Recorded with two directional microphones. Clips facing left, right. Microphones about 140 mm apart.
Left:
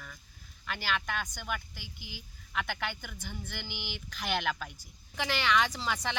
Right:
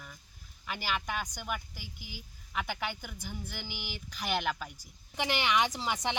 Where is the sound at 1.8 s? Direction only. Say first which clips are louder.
Even; 45° right (ahead or behind).